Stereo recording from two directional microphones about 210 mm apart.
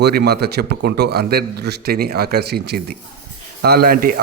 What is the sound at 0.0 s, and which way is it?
A man's voice, 50° right (ahead or behind).